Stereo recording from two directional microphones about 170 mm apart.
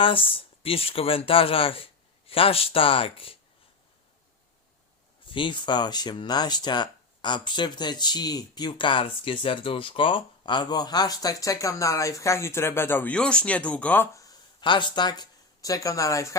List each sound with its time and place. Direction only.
0.0 s speech: 30° left (ahead or behind)
5.3 s speech: 30° left (ahead or behind)